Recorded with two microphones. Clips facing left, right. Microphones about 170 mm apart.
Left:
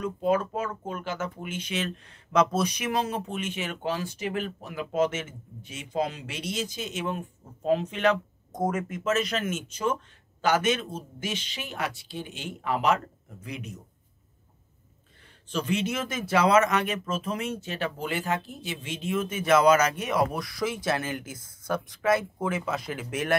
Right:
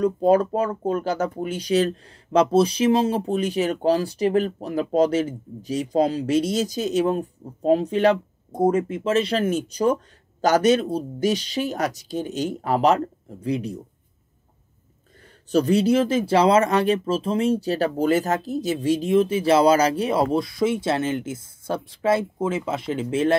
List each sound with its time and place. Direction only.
0.0 s speech: 35° right (ahead or behind)
15.5 s speech: 40° right (ahead or behind)